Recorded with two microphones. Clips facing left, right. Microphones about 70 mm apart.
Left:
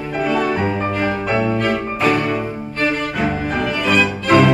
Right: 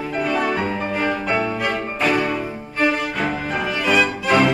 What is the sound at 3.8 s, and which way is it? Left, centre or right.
Music, centre.